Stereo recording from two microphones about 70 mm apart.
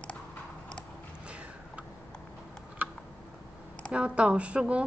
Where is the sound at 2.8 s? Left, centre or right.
Right.